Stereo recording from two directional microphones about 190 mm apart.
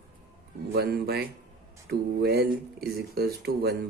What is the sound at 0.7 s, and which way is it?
Speech, 55° right (ahead or behind).